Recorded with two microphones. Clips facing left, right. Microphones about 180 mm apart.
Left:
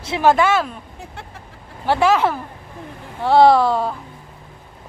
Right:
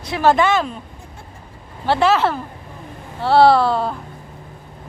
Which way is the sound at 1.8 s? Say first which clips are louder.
Even; 10° left (ahead or behind).